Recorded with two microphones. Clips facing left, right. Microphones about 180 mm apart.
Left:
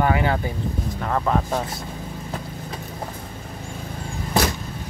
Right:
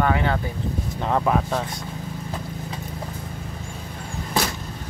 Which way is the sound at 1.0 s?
20° right (ahead or behind).